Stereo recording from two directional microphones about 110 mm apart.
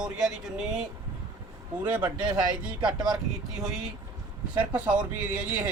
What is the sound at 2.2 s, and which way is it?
Speech, 40° right (ahead or behind).